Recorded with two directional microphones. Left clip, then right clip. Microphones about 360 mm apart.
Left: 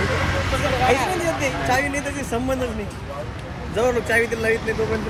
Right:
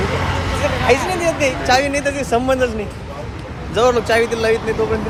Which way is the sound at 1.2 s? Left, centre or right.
Centre.